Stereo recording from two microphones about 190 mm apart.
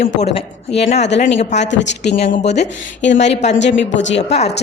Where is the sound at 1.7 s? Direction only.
70° left (ahead or behind).